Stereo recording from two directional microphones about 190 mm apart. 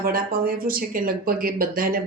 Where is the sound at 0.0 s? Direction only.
50° right (ahead or behind).